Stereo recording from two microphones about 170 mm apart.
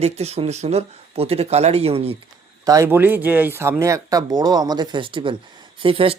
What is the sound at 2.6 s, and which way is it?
Speech, 20° right (ahead or behind).